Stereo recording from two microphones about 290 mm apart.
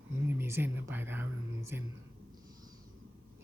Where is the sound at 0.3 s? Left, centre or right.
Centre.